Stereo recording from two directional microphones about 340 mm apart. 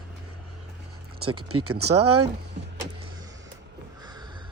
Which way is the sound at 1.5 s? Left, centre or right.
Right.